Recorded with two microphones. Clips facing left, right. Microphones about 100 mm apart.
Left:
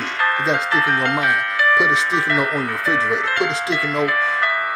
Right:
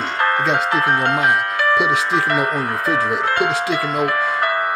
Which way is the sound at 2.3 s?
35° right (ahead or behind).